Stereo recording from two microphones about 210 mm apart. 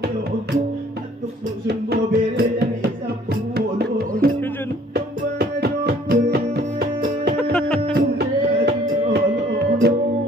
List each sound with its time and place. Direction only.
1.7 s music: 50° right (ahead or behind)
4.2 s music: 50° right (ahead or behind)
7.5 s music: 5° left (ahead or behind)
7.9 s music: 50° right (ahead or behind)